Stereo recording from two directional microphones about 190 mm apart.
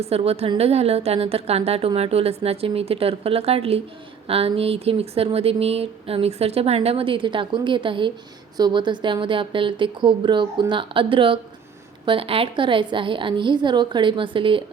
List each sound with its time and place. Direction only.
0.0 s speech: 30° right (ahead or behind)